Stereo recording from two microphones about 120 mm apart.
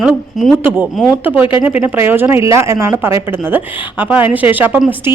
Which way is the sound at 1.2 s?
15° right (ahead or behind).